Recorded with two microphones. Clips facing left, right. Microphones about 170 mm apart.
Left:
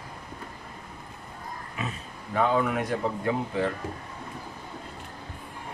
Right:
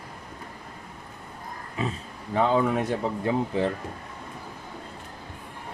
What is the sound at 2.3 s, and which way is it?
Speech, 25° right (ahead or behind).